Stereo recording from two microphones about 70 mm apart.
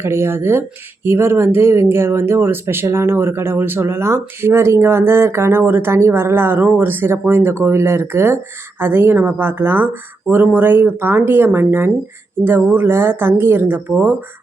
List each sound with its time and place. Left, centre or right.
0.0 s speech: right